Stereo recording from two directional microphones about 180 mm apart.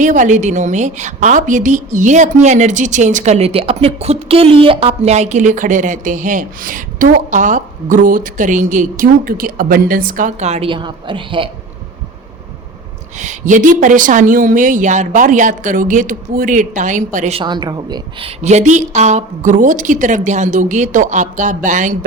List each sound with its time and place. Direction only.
0.0 s a woman's voice: 45° right (ahead or behind); by 11.4 s 30° right (ahead or behind)
13.1 s a woman's voice: 40° right (ahead or behind)
17.4 s a woman's voice: 25° right (ahead or behind); by 21.9 s 45° right (ahead or behind)